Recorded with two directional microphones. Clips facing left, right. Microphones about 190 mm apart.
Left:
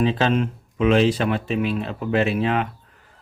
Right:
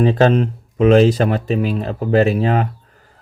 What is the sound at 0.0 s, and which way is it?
Speech, 45° right (ahead or behind).